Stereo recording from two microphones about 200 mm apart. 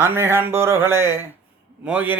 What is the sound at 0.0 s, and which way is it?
Speech, 10° right (ahead or behind).